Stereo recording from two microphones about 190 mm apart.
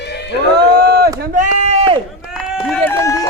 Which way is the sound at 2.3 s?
5° right (ahead or behind).